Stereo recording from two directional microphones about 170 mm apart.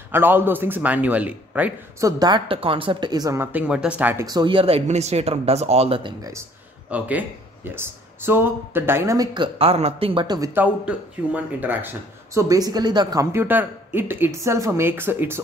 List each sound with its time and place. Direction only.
0.1 s speech: 10° right (ahead or behind)
2.0 s speech: 25° right (ahead or behind)
4.3 s speech: 25° right (ahead or behind)
6.9 s speech: 10° right (ahead or behind); by 10.5 s 25° right (ahead or behind)
10.5 s speech: 10° right (ahead or behind)